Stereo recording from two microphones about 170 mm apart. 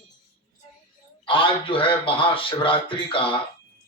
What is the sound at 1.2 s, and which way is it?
A man's voice, 30° left (ahead or behind).